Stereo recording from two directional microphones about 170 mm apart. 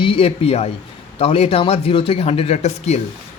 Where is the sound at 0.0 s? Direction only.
30° left (ahead or behind).